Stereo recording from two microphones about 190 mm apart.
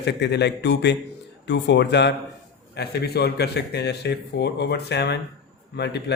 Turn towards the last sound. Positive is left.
turn(degrees=60)  # may be behind; listen again after turning